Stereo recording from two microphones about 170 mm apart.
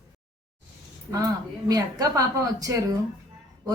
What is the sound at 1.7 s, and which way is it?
Speech, 20° right (ahead or behind).